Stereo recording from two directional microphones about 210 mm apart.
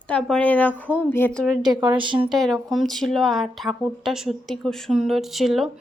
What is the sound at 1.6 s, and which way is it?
Speech, 20° right (ahead or behind).